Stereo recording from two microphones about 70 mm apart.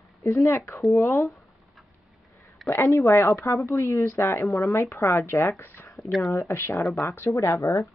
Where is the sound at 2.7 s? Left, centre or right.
Left.